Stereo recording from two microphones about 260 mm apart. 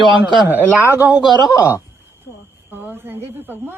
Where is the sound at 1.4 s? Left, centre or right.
Centre.